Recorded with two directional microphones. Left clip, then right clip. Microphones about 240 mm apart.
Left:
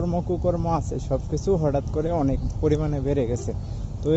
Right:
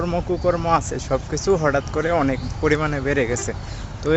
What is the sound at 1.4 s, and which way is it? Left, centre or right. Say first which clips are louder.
Speech: right 5 dB; right.